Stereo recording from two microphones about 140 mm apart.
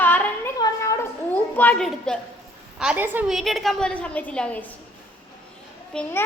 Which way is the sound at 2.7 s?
10° right (ahead or behind).